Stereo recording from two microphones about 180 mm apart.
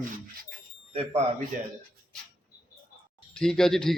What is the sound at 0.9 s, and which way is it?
Speech, 30° right (ahead or behind).